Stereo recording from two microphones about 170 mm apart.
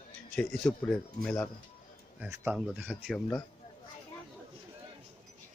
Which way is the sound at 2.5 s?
Centre (ahead or behind).